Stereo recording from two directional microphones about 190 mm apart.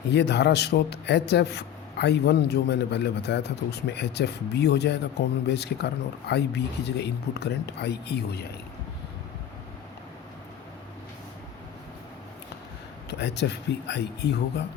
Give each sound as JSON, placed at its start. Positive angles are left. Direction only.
{"t": 0.1, "sound": "a man's voice", "side_deg": 60}
{"t": 13.1, "sound": "a man's voice", "side_deg": 65}